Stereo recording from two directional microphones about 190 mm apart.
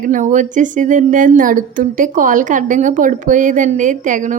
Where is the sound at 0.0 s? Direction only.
40° right (ahead or behind).